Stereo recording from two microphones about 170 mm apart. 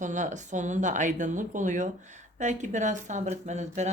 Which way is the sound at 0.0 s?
45° right (ahead or behind).